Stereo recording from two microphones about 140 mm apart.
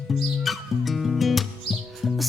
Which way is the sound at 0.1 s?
Centre (ahead or behind).